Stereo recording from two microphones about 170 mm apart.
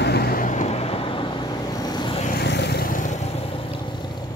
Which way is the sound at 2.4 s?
85° left.